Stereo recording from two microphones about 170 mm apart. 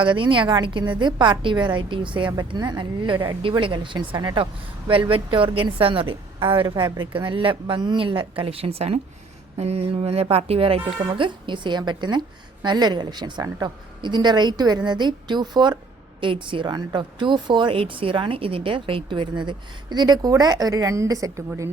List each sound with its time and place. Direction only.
0.0 s speech: 30° right (ahead or behind)